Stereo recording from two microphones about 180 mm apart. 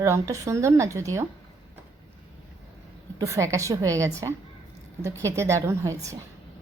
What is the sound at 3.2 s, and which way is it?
A woman's voice, 15° right (ahead or behind).